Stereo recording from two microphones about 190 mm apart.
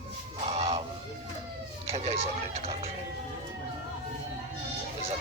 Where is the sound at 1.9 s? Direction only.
35° right (ahead or behind).